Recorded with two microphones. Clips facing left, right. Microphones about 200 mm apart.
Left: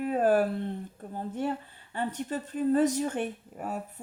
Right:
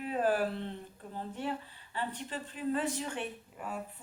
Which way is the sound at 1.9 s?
45° left (ahead or behind).